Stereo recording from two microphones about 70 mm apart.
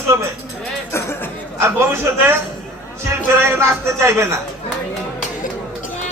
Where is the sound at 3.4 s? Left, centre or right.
Right.